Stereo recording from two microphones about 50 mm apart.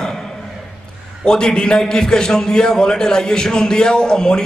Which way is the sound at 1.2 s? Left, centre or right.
Centre.